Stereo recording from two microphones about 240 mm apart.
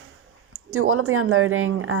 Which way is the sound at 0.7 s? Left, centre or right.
Right.